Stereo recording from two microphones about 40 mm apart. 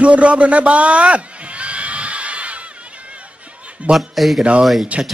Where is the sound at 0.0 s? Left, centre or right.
Right.